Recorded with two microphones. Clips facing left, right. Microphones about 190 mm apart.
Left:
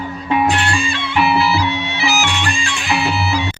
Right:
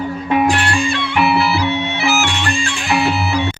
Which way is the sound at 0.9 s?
60° right (ahead or behind).